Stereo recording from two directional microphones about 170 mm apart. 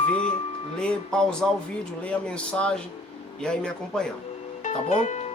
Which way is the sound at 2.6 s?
5° left (ahead or behind).